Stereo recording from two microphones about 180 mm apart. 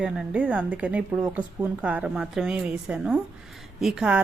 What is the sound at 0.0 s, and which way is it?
A woman's voice, 5° right (ahead or behind).